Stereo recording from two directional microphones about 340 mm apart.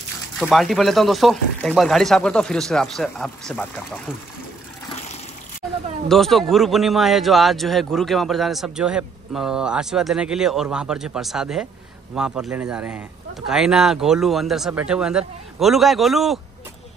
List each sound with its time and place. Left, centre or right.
0.4 s a man's voice: centre
6.0 s a man's voice: centre